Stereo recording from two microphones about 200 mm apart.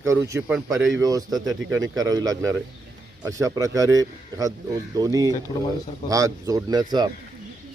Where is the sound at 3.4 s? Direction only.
15° right (ahead or behind).